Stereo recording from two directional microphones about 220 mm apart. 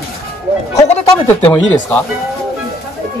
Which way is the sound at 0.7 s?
30° left (ahead or behind).